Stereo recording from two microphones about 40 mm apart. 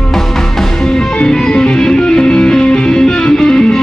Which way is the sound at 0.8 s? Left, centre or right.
Centre.